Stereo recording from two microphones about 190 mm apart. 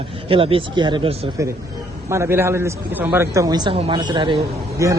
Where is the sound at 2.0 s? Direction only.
15° right (ahead or behind).